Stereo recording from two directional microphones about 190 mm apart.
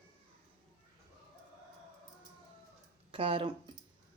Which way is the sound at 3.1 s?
30° right (ahead or behind).